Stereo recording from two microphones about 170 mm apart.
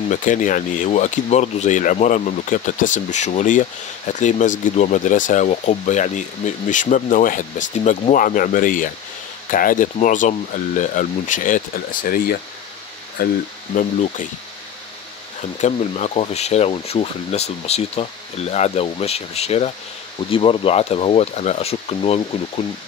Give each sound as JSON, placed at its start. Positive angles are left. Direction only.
{"t": 0.1, "sound": "speech", "side_deg": 50}
{"t": 15.6, "sound": "speech", "side_deg": 40}